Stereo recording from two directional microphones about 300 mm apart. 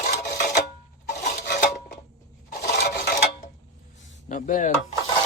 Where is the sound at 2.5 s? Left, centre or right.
Left.